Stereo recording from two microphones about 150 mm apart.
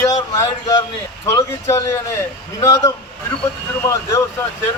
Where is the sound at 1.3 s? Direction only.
20° left (ahead or behind).